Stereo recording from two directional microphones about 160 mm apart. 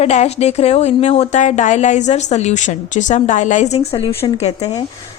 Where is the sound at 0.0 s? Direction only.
45° left (ahead or behind).